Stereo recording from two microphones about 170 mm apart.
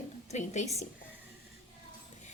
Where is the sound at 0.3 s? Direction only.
40° left (ahead or behind).